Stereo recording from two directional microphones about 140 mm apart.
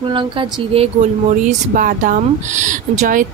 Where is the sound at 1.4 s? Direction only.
85° right; by 3.3 s 65° right (ahead or behind).